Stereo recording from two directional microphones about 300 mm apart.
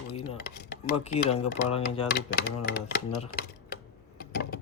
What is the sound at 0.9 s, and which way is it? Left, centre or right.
Speech, left.